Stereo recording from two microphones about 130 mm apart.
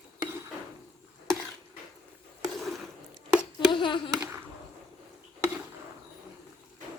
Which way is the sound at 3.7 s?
40° left (ahead or behind).